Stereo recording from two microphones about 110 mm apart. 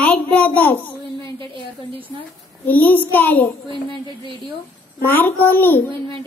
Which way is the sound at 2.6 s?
15° left (ahead or behind).